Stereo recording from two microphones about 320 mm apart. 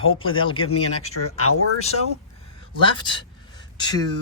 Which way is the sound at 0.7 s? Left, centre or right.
Left.